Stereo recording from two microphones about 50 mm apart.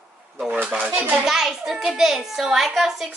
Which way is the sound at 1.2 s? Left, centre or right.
Centre.